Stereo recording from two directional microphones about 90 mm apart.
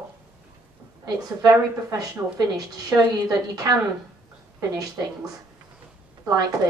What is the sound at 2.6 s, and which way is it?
A woman's voice, 40° right (ahead or behind).